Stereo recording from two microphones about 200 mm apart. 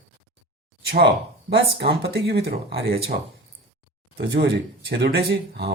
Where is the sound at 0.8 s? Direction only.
55° right (ahead or behind).